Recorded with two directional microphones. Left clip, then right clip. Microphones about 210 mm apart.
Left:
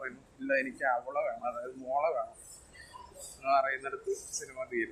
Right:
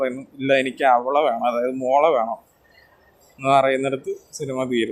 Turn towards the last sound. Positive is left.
turn(degrees=-35)  # may be behind; listen again after turning